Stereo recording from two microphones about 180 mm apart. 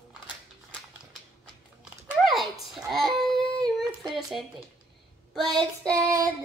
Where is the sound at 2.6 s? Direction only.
Centre (ahead or behind).